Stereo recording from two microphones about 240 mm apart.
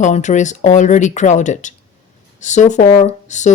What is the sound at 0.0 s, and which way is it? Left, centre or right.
Speech, left.